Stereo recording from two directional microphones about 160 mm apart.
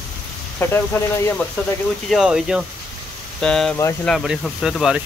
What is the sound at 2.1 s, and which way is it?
Speech, 5° right (ahead or behind).